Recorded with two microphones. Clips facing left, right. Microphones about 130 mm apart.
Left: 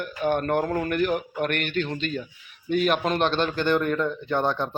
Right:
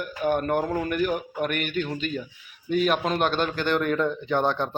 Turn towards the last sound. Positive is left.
turn(degrees=5)  # may be behind; listen again after turning